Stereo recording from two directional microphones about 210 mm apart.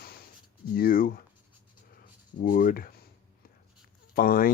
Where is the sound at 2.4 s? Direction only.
40° left (ahead or behind).